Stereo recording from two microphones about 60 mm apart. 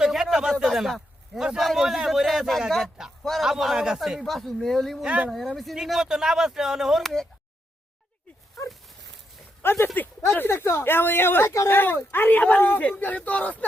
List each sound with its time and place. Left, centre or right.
0.0 s a sound: centre
0.6 s a man's voice: centre
5.0 s speech: centre
5.7 s speech: centre
9.6 s speech: left
11.4 s speech: left
11.7 s speech: left